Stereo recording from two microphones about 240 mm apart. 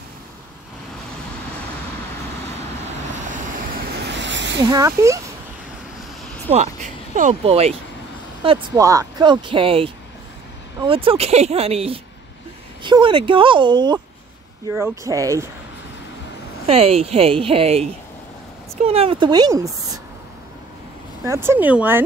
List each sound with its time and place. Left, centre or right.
3.5 s vehicle: right
4.6 s speech: centre
6.5 s speech: right; by 15.5 s centre
16.6 s speech: right
21.3 s speech: centre